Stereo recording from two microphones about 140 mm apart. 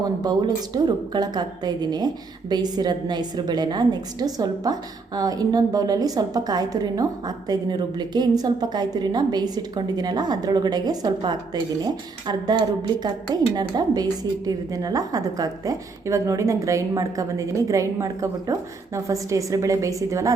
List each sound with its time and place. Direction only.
0.2 s a woman's voice: 30° right (ahead or behind)